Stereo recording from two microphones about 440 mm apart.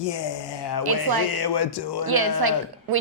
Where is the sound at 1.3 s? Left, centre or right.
Left.